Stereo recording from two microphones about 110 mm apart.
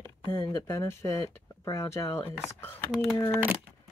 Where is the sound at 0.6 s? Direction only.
25° left (ahead or behind).